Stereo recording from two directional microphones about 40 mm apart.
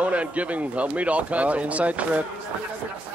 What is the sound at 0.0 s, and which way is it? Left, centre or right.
Speech, right.